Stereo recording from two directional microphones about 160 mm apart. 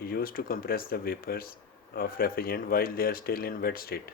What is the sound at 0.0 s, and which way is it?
Speech, 65° left (ahead or behind).